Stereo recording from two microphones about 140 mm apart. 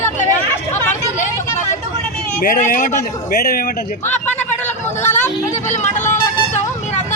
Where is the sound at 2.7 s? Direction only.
70° left (ahead or behind).